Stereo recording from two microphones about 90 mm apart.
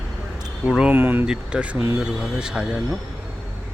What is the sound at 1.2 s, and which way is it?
Speech, 10° right (ahead or behind).